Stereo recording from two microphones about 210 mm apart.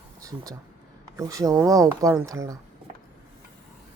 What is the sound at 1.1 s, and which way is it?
Speech, 15° right (ahead or behind).